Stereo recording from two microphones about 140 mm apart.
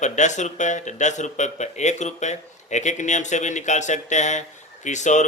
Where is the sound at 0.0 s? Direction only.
60° left (ahead or behind).